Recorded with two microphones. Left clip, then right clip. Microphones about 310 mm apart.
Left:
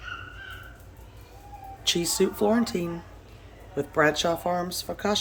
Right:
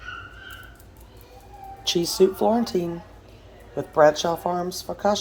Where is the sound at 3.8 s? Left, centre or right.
Centre.